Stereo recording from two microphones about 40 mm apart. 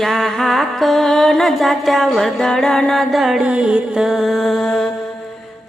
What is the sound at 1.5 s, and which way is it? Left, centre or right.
Music, centre.